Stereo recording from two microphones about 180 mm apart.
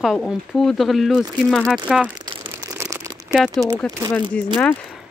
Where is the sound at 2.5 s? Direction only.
20° right (ahead or behind).